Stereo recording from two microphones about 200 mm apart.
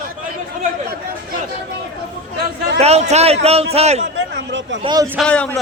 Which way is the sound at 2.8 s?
35° right (ahead or behind).